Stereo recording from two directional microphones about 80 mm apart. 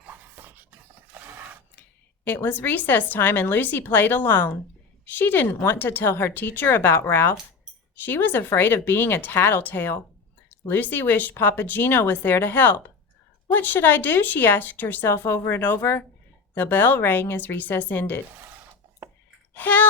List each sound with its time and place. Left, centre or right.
0.1 s a sound: right
2.2 s a woman's voice: left
19.5 s speech: left